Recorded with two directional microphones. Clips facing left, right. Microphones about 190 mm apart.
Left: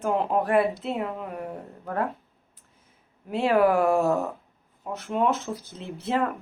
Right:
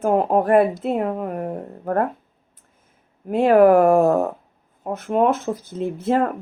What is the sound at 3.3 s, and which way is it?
Speech, 50° right (ahead or behind).